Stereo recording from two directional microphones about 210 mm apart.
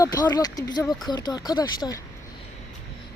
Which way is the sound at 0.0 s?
15° left (ahead or behind).